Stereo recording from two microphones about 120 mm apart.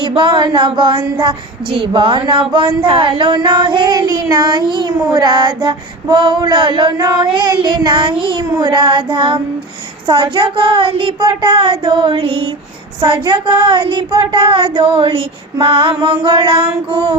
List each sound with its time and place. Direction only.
0.0 s child singing: 45° right (ahead or behind)